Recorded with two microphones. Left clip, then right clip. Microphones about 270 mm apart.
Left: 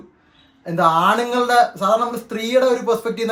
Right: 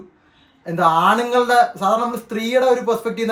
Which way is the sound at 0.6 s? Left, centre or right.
Centre.